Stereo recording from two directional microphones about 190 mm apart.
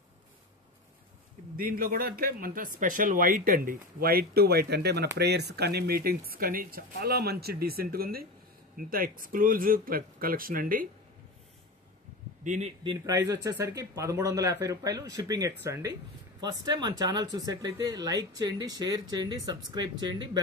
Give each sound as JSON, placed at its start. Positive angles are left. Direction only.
{"t": 1.6, "sound": "speech", "side_deg": -50}
{"t": 12.4, "sound": "speech", "side_deg": -35}